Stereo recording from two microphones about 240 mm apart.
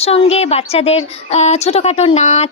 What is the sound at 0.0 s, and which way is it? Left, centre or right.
Speech, left.